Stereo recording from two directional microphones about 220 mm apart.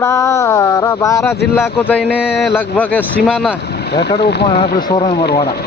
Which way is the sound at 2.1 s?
5° right (ahead or behind).